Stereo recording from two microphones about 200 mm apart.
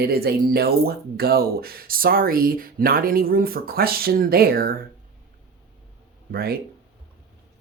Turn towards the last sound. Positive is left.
turn(degrees=-50)  # may be behind; listen again after turning